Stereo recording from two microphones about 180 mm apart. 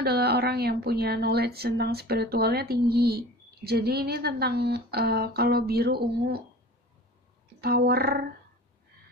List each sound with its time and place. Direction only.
0.0 s a woman's voice: 60° right (ahead or behind)
7.6 s a woman's voice: 60° right (ahead or behind)